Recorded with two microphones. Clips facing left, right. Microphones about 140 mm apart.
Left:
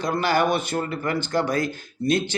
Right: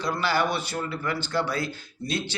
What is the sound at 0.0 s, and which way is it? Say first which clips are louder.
A man's voice: left 4 dB; 50° left (ahead or behind).